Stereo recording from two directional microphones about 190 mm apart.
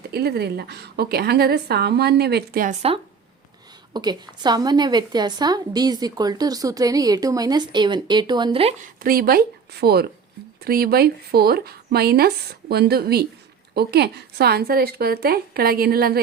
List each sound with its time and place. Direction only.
0.1 s a woman's voice: 55° right (ahead or behind)
3.9 s a woman's voice: 20° right (ahead or behind)
8.8 s a woman's voice: 50° right (ahead or behind)